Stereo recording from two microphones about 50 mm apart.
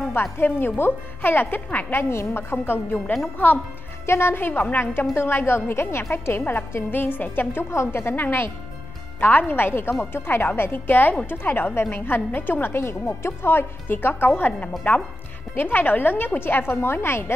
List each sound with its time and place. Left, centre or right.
0.1 s a woman's voice: left
1.9 s a woman's voice: left
4.0 s a woman's voice: left
7.7 s a woman's voice: left
12.7 s a woman's voice: left